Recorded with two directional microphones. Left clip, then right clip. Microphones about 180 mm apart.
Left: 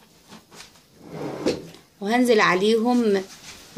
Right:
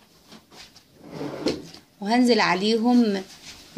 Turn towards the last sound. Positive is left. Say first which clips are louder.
# left 2 dB
turn(degrees=-35)  # may be behind; listen again after turning